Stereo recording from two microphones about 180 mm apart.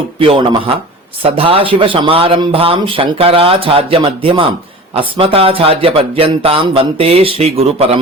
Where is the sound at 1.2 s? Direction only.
30° right (ahead or behind).